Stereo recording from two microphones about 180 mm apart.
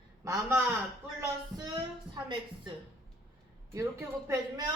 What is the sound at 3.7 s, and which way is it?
Speech, 15° right (ahead or behind).